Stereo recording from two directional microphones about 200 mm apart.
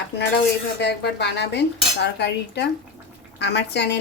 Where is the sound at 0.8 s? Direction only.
55° left (ahead or behind).